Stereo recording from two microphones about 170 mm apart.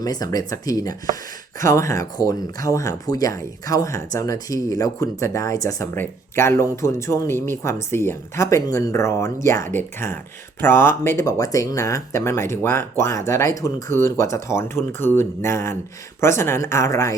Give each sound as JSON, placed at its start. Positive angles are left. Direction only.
{"t": 0.0, "sound": "speech", "side_deg": 20}